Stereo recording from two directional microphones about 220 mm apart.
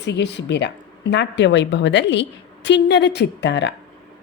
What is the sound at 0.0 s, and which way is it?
A woman's voice, 50° left (ahead or behind).